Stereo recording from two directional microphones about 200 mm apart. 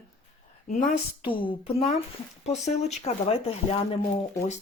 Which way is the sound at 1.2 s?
25° left (ahead or behind).